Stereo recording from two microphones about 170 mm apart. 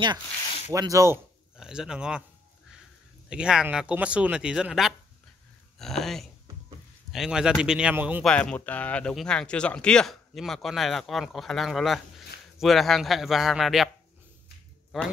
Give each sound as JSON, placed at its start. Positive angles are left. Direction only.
{"t": 0.7, "sound": "speech", "side_deg": -20}
{"t": 1.6, "sound": "speech", "side_deg": -5}
{"t": 3.3, "sound": "speech", "side_deg": -5}
{"t": 8.2, "sound": "speech", "side_deg": 5}